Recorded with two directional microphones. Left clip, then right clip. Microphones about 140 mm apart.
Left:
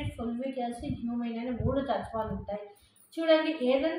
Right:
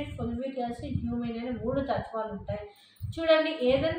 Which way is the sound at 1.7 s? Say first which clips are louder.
Even; centre (ahead or behind).